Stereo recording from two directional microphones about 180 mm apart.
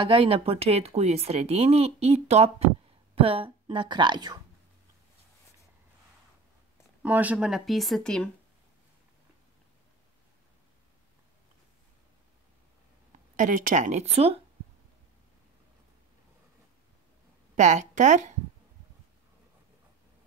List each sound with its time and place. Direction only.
0.0 s speech: 30° right (ahead or behind)
7.0 s speech: 10° right (ahead or behind)
13.4 s speech: 45° right (ahead or behind)
17.6 s speech: 40° right (ahead or behind)